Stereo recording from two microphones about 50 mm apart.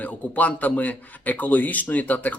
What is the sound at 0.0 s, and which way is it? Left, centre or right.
Speech, left.